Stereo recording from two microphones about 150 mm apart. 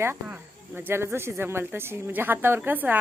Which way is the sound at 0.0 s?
15° right (ahead or behind).